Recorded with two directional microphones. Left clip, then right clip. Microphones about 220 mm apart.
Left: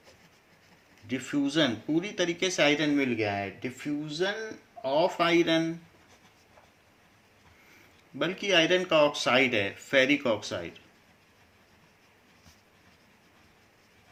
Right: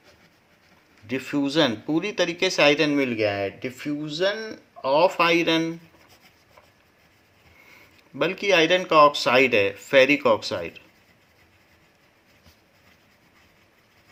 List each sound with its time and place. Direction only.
1.0 s speech: 40° right (ahead or behind)
8.2 s speech: 40° right (ahead or behind)